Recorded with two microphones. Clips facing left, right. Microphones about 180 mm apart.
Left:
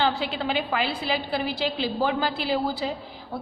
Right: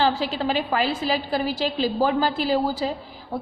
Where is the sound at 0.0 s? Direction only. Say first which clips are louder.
Right 3 dB; 40° right (ahead or behind).